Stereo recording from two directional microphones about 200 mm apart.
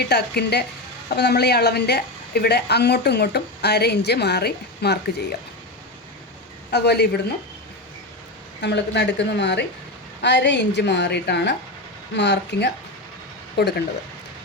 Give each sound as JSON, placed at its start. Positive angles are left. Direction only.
{"t": 0.0, "sound": "a woman's voice", "side_deg": 55}
{"t": 6.7, "sound": "a woman's voice", "side_deg": 55}
{"t": 8.6, "sound": "a woman's voice", "side_deg": 60}